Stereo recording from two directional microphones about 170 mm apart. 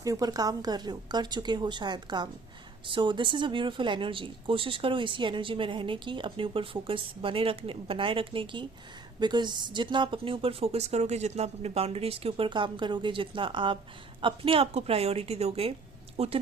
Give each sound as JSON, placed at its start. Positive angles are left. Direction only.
{"t": 0.0, "sound": "speech", "side_deg": -20}